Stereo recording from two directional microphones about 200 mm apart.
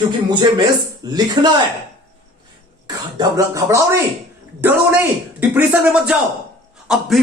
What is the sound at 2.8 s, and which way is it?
A man's voice, 20° right (ahead or behind).